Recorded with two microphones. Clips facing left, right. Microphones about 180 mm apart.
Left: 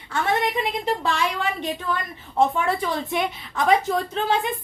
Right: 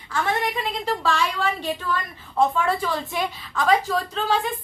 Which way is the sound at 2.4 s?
20° left (ahead or behind).